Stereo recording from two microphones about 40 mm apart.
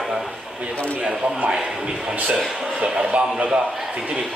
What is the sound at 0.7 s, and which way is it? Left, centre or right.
Speech, left.